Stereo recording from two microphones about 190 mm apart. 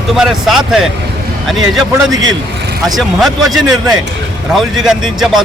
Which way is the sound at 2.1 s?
85° right.